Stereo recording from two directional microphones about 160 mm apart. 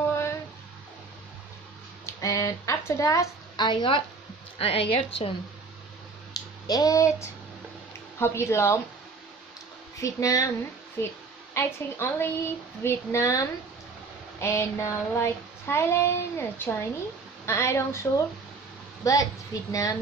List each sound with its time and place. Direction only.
0.1 s a sound: 15° left (ahead or behind)
2.2 s a woman's voice: 20° left (ahead or behind); by 5.3 s 40° left (ahead or behind)
6.3 s a sound: 25° left (ahead or behind)
8.2 s child singing: 15° left (ahead or behind)
9.9 s a woman's voice: 20° left (ahead or behind)
11.0 s child singing: 15° left (ahead or behind)
12.8 s a woman's voice: 20° left (ahead or behind)
14.4 s child singing: 15° left (ahead or behind)
19.0 s a woman's voice: 20° left (ahead or behind)